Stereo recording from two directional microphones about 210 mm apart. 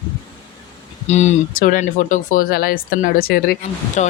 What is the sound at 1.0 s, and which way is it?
Speech, 35° left (ahead or behind).